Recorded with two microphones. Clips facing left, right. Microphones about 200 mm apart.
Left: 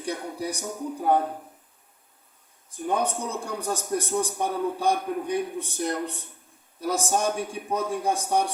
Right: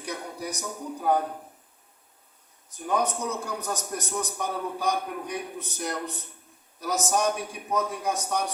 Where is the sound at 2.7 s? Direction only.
30° left (ahead or behind).